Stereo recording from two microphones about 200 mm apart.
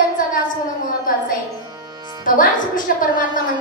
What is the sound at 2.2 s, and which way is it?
A woman's voice, 45° left (ahead or behind).